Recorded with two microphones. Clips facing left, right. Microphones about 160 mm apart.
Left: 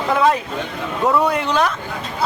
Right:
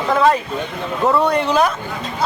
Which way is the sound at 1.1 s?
Centre (ahead or behind).